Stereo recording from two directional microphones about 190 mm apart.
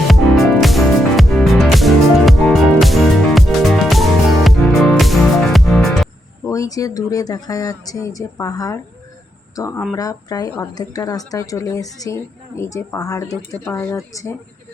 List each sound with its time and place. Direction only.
0.1 s music: centre (ahead or behind)
6.4 s speech: 15° left (ahead or behind)
13.5 s speech: 5° left (ahead or behind)
13.9 s speech: 15° left (ahead or behind)